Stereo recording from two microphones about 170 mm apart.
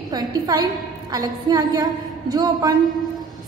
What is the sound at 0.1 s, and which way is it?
A woman's voice, 20° right (ahead or behind).